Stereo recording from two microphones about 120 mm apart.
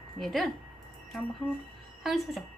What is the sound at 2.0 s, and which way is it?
Speech, centre (ahead or behind).